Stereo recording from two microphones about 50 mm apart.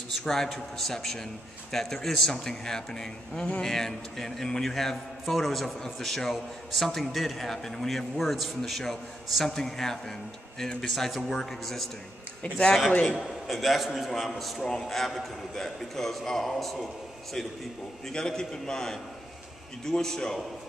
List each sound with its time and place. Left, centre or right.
0.2 s a man's voice: centre
8.2 s a man's voice: centre
12.4 s a man's voice: centre
13.2 s a man's voice: centre